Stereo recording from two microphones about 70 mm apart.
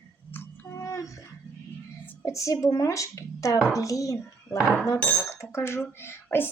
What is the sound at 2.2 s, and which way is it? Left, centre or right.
A woman's voice, left.